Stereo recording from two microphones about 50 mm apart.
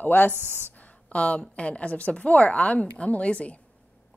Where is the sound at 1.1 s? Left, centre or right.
Left.